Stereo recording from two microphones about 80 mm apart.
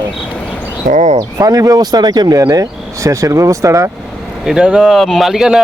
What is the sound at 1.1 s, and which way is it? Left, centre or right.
Speech, right.